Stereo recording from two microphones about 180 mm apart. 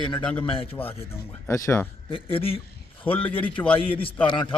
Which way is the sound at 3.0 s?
10° left (ahead or behind).